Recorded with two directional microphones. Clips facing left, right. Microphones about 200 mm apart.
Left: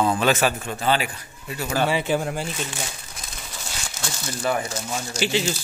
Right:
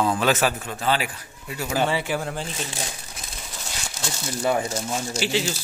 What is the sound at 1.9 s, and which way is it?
Speech, 15° left (ahead or behind).